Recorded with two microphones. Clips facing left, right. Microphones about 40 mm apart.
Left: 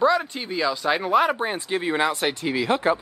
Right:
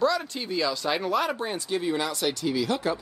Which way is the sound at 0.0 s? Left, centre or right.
Left.